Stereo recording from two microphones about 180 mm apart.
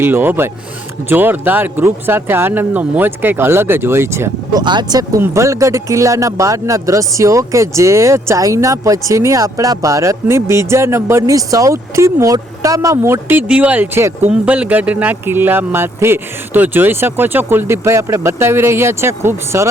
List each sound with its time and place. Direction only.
0.0 s speech: 10° right (ahead or behind)
4.6 s speech: 25° right (ahead or behind)